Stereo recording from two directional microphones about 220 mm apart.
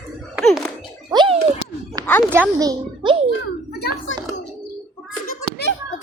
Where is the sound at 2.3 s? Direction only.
15° right (ahead or behind).